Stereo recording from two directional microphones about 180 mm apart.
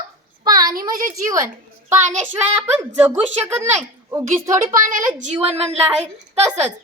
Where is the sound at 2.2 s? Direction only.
10° right (ahead or behind).